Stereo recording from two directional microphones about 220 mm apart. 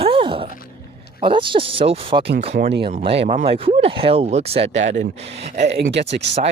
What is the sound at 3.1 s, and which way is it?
Speech, 30° right (ahead or behind).